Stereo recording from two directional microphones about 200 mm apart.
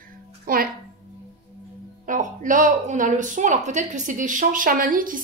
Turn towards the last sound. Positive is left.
turn(degrees=-40)  # may be behind; listen again after turning